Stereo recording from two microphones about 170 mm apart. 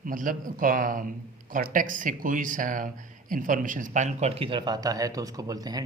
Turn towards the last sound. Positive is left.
turn(degrees=-20)  # may be behind; listen again after turning